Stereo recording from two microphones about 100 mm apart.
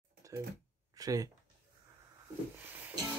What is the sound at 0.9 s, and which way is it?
Speech, 35° right (ahead or behind).